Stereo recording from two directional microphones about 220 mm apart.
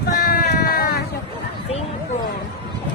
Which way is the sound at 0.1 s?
40° left (ahead or behind).